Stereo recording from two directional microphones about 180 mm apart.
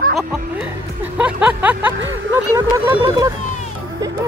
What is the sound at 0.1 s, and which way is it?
Music, centre (ahead or behind).